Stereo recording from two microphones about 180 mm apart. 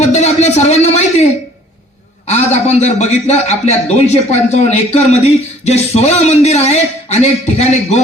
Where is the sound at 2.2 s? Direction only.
40° left (ahead or behind).